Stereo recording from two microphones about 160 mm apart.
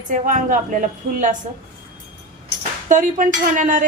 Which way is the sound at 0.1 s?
55° right (ahead or behind).